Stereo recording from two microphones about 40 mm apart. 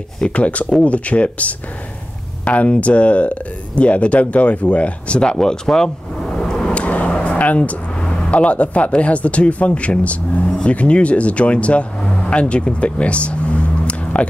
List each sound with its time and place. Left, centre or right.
0.3 s speech: left; by 5.9 s centre
6.3 s a sound: centre
6.7 s vehicle: left
8.3 s speech: left
12.0 s vehicle: left